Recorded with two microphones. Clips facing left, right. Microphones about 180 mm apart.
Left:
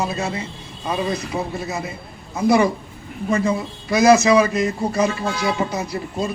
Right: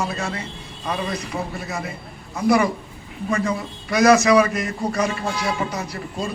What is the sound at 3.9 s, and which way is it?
A man's voice, 25° left (ahead or behind).